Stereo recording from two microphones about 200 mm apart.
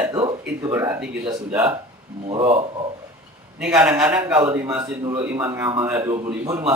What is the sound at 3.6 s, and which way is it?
A man's voice, 5° right (ahead or behind).